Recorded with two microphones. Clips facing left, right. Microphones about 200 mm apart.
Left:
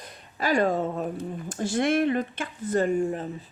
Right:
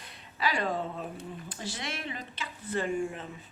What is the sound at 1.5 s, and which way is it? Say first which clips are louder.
Speech: left 17 dB; 50° left (ahead or behind).